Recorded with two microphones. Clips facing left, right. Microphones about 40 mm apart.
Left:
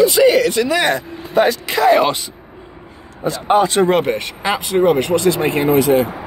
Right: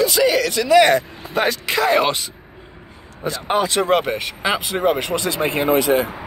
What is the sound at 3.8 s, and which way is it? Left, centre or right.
Speech, centre.